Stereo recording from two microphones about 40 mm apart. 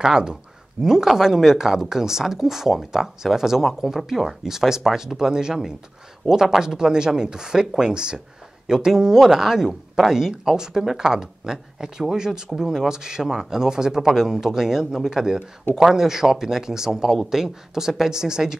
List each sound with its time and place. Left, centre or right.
0.0 s speech: centre